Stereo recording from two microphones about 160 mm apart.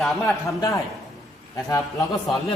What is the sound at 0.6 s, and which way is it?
A man's voice, 20° left (ahead or behind).